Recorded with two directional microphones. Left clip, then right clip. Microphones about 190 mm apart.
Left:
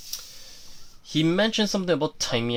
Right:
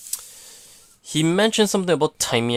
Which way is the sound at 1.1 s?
35° right (ahead or behind).